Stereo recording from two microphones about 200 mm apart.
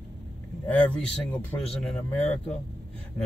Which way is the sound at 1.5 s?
5° left (ahead or behind).